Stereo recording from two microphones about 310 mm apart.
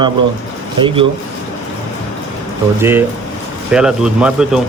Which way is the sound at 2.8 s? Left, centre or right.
Centre.